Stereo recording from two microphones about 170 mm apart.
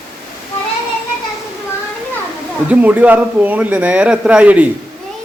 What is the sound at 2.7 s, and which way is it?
Speech, 10° right (ahead or behind).